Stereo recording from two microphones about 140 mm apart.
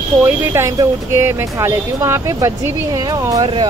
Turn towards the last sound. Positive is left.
turn(degrees=-25)  # may be behind; listen again after turning